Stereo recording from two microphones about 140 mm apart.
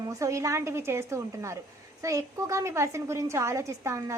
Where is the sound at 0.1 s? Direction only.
20° right (ahead or behind).